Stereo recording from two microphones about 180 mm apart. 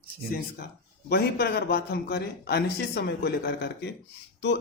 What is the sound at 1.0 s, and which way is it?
A man's voice, 65° left (ahead or behind).